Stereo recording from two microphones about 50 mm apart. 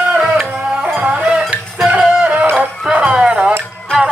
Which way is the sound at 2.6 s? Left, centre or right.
Centre.